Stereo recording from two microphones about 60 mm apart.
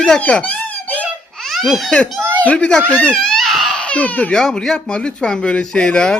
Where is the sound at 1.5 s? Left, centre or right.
Centre.